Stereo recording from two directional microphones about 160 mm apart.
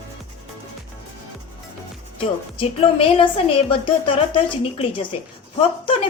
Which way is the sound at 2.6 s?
35° left (ahead or behind).